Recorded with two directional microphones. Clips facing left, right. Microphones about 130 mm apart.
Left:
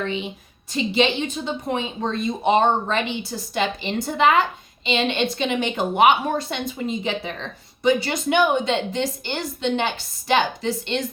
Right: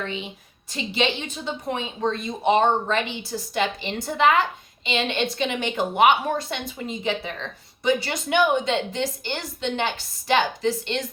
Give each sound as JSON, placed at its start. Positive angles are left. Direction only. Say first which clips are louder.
{"t": 0.0, "sound": "a woman's voice", "louder": "left 4 dB", "side_deg": 20}